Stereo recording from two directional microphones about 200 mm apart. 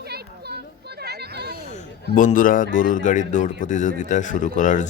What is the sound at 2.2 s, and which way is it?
Speech, 40° left (ahead or behind).